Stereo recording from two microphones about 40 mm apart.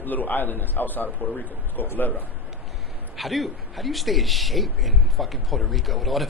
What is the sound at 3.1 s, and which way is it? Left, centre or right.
A man's voice, centre.